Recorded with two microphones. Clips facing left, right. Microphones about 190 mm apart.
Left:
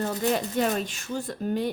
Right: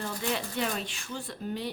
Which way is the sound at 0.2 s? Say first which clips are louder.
Left 6 dB; 45° left (ahead or behind).